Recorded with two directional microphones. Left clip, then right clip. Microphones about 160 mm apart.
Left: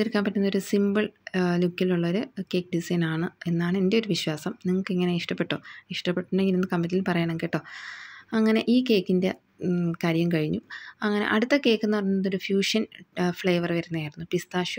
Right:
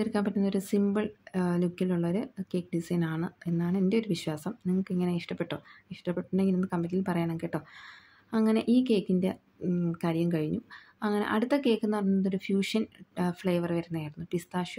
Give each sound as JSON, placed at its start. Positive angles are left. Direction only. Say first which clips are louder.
{"t": 0.0, "sound": "speech", "louder": "left 5 dB", "side_deg": 15}